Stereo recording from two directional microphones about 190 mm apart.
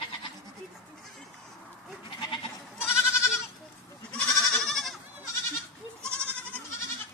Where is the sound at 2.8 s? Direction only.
15° left (ahead or behind).